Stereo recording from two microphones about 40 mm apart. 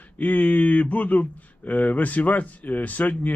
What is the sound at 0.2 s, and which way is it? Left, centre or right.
Speech, left.